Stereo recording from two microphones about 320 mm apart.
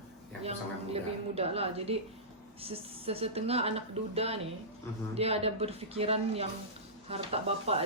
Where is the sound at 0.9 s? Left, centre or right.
Centre.